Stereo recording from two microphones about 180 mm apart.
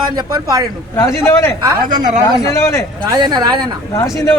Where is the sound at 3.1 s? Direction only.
25° right (ahead or behind).